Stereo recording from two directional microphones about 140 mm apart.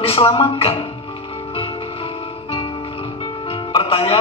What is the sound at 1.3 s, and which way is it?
Music, 45° left (ahead or behind).